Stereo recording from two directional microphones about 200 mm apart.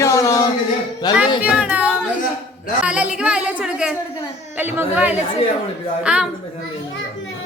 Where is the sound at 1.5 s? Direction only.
5° right (ahead or behind).